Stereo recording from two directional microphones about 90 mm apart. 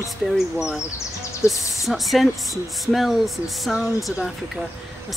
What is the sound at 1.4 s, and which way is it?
Speech, 35° left (ahead or behind).